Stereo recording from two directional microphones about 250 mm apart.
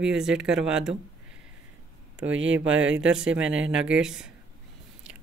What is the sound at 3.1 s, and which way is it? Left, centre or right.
Speech, centre.